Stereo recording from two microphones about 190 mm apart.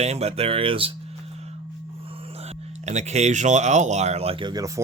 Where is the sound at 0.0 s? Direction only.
35° right (ahead or behind).